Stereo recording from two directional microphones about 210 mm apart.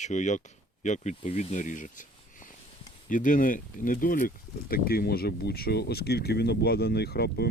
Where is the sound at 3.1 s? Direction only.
40° left (ahead or behind).